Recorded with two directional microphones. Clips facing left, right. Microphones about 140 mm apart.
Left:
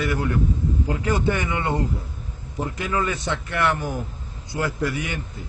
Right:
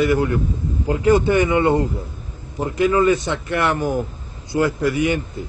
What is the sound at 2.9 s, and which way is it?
Speech, 15° right (ahead or behind).